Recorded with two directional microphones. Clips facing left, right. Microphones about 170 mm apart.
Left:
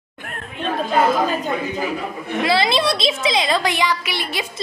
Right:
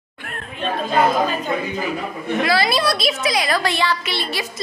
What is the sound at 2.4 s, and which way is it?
A woman's voice, 25° left (ahead or behind).